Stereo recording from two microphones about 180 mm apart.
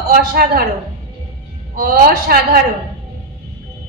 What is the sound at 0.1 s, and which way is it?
Speech, 55° right (ahead or behind).